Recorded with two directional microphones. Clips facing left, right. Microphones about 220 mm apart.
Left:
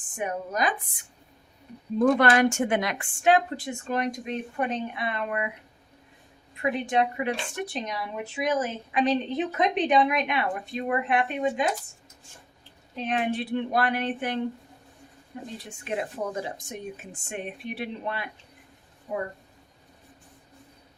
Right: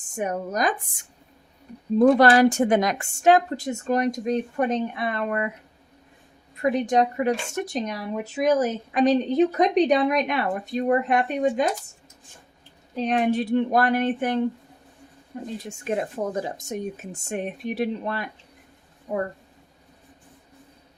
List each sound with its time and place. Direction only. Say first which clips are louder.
0.1 s a woman's voice: right 4 dB; 40° right (ahead or behind)
6.6 s a woman's voice: right 4 dB; 40° right (ahead or behind)
13.0 s speech: right 5 dB; 40° right (ahead or behind)